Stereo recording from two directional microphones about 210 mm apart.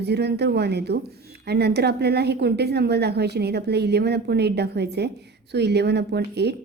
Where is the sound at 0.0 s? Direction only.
50° right (ahead or behind).